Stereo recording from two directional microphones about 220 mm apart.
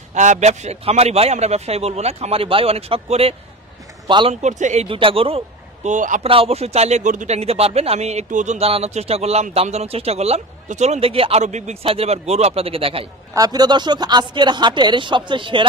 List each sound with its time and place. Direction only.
0.1 s speech: 35° right (ahead or behind)
4.4 s speech: 35° right (ahead or behind)